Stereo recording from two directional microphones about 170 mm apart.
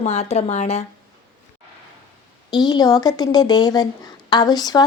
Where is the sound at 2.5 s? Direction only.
25° left (ahead or behind).